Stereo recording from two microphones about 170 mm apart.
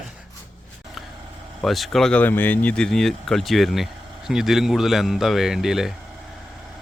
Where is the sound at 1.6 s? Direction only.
Centre (ahead or behind).